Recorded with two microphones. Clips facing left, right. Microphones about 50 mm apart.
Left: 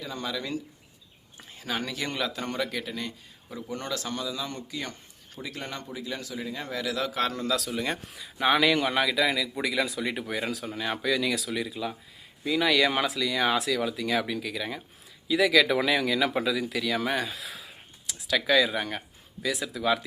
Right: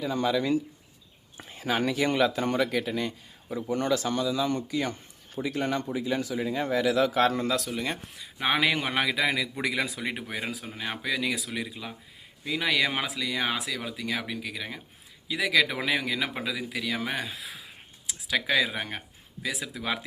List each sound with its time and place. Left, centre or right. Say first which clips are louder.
0.0 s speech: right 7 dB; centre
8.4 s a man's voice: left 3 dB; centre; by 10.0 s right
10.0 s speech: left 2 dB; centre
18.1 s speech: left 3 dB; right